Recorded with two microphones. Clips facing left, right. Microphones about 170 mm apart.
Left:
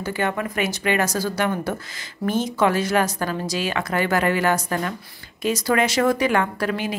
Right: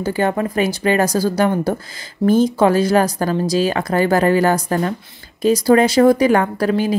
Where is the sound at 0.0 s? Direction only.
35° right (ahead or behind).